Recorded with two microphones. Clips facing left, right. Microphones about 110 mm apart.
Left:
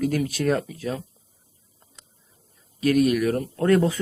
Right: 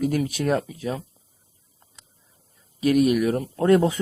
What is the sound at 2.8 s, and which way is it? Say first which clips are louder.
Speech: right 1 dB; 15° right (ahead or behind).